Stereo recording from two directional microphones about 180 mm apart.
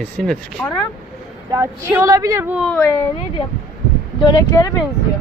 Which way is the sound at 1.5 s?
15° right (ahead or behind).